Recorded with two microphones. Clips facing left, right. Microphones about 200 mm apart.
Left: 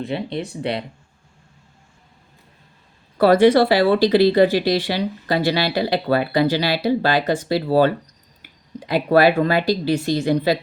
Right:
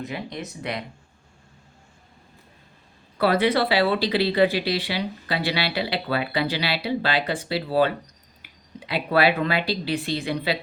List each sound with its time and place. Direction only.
0.0 s speech: 30° left (ahead or behind)
3.2 s speech: 45° left (ahead or behind)